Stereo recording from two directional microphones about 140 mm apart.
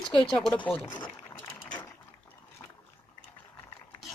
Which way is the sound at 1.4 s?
10° left (ahead or behind).